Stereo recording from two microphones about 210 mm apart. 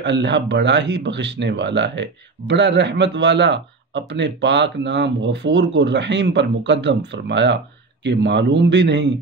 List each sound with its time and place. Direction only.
0.0 s speech: 55° right (ahead or behind)